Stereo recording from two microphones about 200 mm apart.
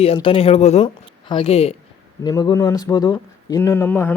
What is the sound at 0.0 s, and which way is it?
Speech, 30° left (ahead or behind).